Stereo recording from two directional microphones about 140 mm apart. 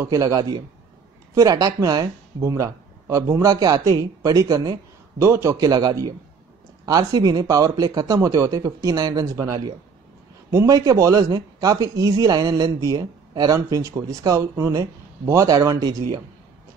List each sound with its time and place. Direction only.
0.0 s speech: 25° right (ahead or behind)